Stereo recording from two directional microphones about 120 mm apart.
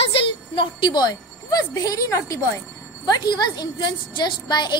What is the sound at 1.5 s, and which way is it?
A woman's voice, 30° left (ahead or behind).